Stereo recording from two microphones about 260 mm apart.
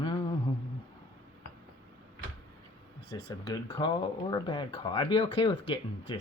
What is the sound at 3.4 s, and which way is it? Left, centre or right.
Speech, centre.